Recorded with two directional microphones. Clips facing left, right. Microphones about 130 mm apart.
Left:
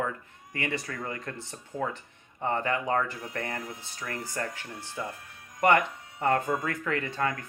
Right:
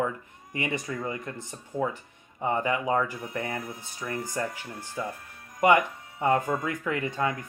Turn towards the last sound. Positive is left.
turn(degrees=-15)  # may be behind; listen again after turning